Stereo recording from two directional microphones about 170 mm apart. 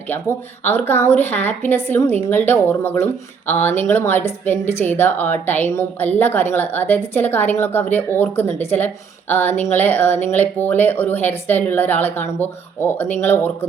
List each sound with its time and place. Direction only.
0.1 s speech: 10° left (ahead or behind)